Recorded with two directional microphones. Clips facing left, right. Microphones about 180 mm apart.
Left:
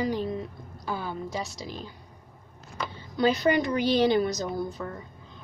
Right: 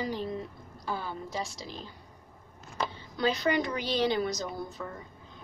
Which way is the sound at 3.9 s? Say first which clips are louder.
Left 5 dB; 55° left (ahead or behind).